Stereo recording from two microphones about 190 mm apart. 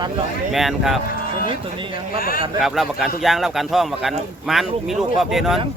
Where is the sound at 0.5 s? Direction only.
Centre (ahead or behind).